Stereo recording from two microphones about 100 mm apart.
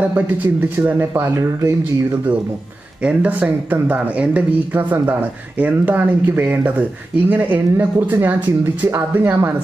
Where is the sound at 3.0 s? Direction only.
15° right (ahead or behind).